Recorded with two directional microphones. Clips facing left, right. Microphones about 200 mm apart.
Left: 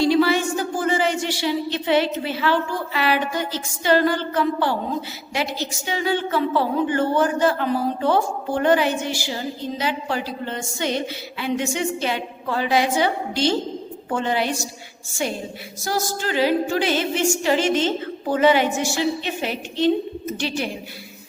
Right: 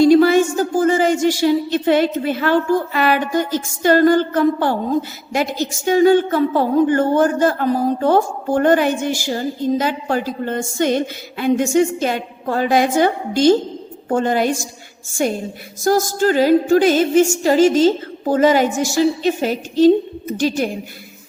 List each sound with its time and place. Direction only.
0.0 s a woman's voice: 45° right (ahead or behind)
15.8 s a woman's voice: 45° right (ahead or behind)